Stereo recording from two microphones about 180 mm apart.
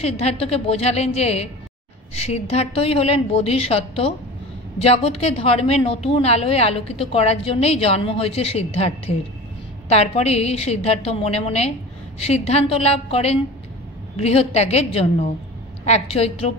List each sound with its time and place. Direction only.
0.0 s a woman's voice: 35° left (ahead or behind)